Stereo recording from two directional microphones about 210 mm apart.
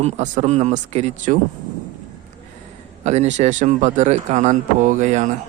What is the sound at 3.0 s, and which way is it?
A man's voice, 30° right (ahead or behind).